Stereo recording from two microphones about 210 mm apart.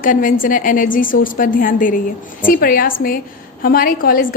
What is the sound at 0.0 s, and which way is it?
A woman's voice, 40° left (ahead or behind).